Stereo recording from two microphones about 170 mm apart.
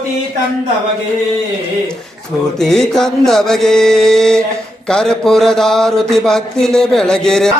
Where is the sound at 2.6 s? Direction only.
Centre (ahead or behind).